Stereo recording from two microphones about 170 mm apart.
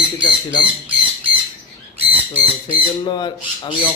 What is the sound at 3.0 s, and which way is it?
Speech, 25° left (ahead or behind).